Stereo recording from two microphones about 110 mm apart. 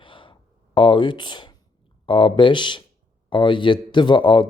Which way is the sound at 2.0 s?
50° left (ahead or behind).